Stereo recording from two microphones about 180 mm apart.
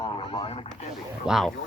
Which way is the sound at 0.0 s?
30° left (ahead or behind).